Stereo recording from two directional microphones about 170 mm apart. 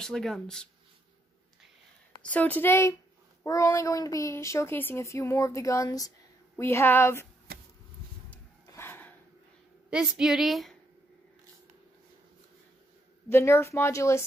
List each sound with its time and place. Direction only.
0.0 s a woman's voice: centre (ahead or behind)
2.3 s speech: 10° left (ahead or behind)
8.6 s a sound: 15° left (ahead or behind)
9.8 s a woman's voice: 5° right (ahead or behind)
13.3 s speech: 15° left (ahead or behind)